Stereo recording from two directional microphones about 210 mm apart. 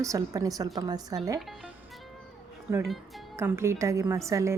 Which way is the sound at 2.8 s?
Centre (ahead or behind).